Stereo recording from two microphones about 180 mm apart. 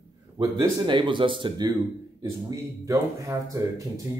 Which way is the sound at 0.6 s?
25° right (ahead or behind).